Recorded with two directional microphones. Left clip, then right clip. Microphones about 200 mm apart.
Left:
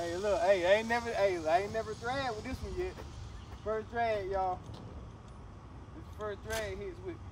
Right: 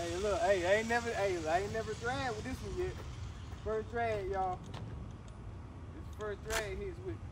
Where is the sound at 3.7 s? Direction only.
50° left (ahead or behind).